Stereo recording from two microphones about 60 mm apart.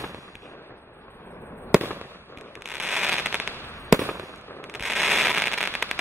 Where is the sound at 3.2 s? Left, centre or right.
Right.